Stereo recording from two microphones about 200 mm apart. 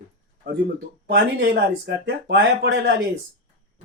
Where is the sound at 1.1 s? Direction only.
50° right (ahead or behind).